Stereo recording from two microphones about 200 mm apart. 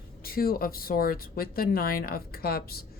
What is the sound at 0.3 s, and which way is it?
Speech, 45° left (ahead or behind).